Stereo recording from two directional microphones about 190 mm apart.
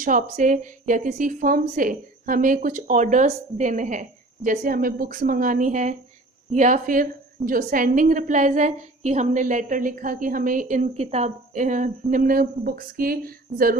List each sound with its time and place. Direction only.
0.0 s a woman's voice: 45° right (ahead or behind)